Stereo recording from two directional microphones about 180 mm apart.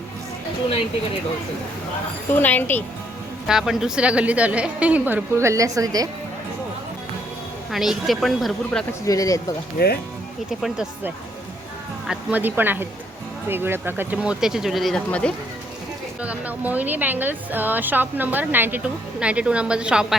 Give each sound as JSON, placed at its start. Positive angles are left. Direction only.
{"t": 2.3, "sound": "a woman's voice", "side_deg": 10}
{"t": 3.4, "sound": "a woman's voice", "side_deg": 0}
{"t": 7.7, "sound": "speech", "side_deg": 0}
{"t": 8.9, "sound": "speech", "side_deg": 20}
{"t": 9.7, "sound": "speech", "side_deg": 60}
{"t": 10.6, "sound": "a woman's voice", "side_deg": -5}
{"t": 16.2, "sound": "a woman's voice", "side_deg": -10}